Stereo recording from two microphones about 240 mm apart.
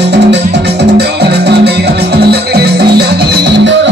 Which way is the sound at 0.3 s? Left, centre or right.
Right.